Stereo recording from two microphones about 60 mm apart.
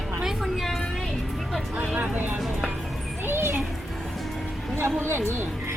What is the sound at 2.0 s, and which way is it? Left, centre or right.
Speech, right.